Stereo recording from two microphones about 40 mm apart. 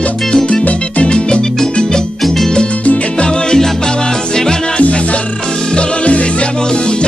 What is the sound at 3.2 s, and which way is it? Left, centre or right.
Music, centre.